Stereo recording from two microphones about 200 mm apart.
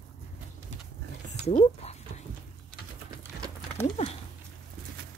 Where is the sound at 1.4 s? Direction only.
30° left (ahead or behind).